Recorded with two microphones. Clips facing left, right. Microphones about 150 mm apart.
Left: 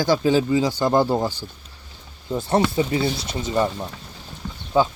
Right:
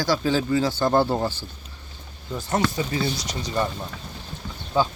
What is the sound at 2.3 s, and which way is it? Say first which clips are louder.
Speech: left 4 dB; 25° left (ahead or behind).